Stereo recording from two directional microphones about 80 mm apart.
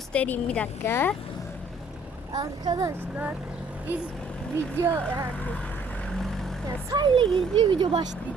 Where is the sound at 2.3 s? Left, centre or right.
Right.